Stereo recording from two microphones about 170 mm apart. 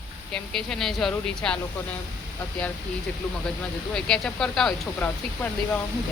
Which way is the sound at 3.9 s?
5° left (ahead or behind).